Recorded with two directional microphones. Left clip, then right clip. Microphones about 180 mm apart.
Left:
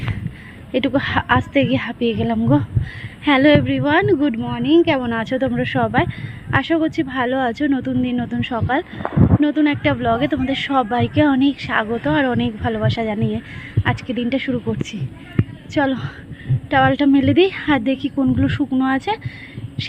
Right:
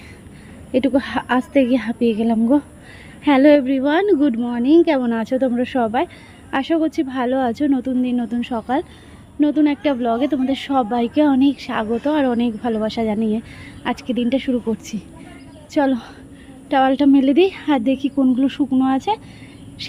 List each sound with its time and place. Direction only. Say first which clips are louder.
0.7 s a woman's voice: even; 10° right (ahead or behind)